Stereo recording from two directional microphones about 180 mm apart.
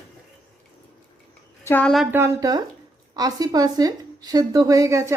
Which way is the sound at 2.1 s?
15° right (ahead or behind).